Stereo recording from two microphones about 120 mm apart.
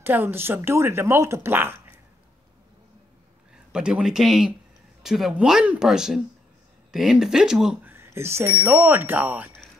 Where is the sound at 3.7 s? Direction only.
5° right (ahead or behind).